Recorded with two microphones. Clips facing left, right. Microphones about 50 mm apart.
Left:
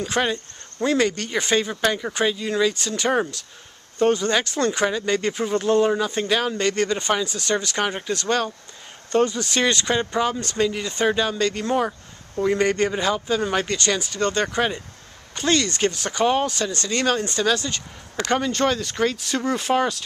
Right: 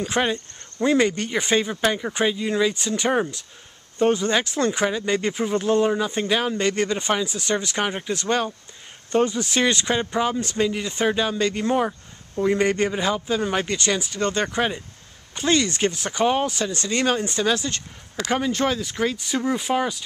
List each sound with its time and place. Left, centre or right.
0.0 s speech: centre